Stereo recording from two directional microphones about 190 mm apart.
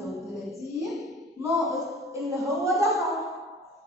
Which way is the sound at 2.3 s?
15° right (ahead or behind).